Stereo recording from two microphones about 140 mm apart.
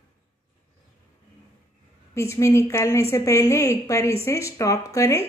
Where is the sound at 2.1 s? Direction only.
20° left (ahead or behind).